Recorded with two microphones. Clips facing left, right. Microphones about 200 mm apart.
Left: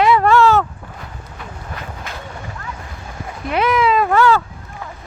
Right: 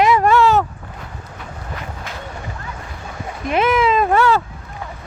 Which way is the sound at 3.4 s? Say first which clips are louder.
Even; 20° right (ahead or behind).